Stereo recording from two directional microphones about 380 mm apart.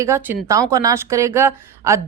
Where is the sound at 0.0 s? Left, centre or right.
Centre.